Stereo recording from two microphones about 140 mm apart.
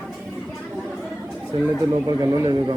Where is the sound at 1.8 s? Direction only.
25° right (ahead or behind).